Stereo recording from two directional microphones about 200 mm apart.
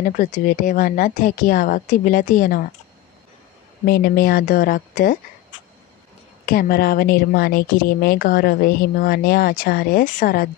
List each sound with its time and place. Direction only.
0.0 s speech: 40° left (ahead or behind)
3.8 s speech: 50° left (ahead or behind)
6.4 s speech: 45° left (ahead or behind)